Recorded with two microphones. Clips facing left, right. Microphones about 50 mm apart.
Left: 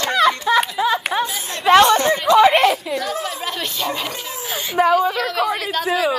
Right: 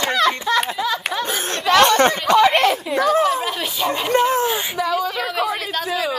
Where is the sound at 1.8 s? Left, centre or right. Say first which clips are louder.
Right 1 dB; right.